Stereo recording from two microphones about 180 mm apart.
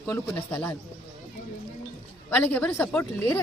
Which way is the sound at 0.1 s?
10° left (ahead or behind).